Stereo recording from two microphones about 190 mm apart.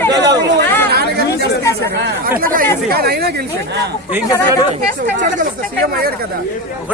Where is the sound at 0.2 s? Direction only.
65° right (ahead or behind).